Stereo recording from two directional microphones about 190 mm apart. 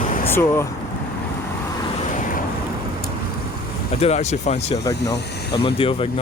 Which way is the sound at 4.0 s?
35° left (ahead or behind).